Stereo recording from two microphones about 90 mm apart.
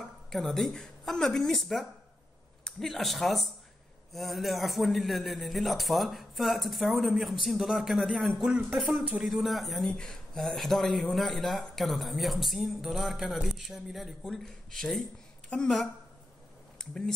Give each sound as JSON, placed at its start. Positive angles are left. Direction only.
{"t": 0.3, "sound": "speech", "side_deg": 5}
{"t": 8.9, "sound": "speech", "side_deg": -15}
{"t": 9.2, "sound": "speech", "side_deg": 0}
{"t": 16.7, "sound": "speech", "side_deg": 5}